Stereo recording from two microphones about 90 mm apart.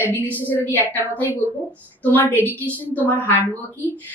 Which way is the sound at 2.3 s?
20° right (ahead or behind).